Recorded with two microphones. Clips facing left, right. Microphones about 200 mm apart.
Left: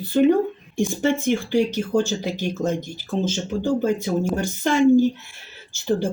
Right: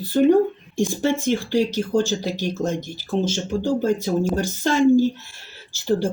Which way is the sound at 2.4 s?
15° left (ahead or behind).